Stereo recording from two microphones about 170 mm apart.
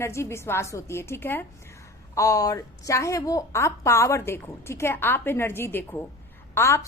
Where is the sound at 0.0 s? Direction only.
15° left (ahead or behind).